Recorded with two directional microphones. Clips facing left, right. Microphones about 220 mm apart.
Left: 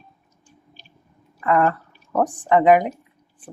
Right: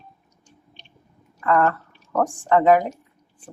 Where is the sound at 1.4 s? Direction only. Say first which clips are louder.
Left 1 dB; 20° left (ahead or behind).